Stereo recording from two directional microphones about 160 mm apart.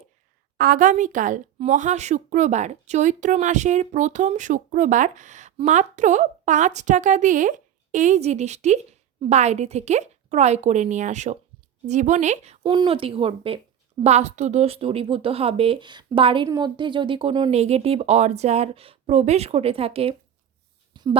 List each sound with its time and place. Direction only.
0.5 s a woman's voice: 65° right (ahead or behind); by 12.5 s 45° right (ahead or behind)
12.6 s speech: 30° right (ahead or behind)
20.9 s a sound: 30° right (ahead or behind)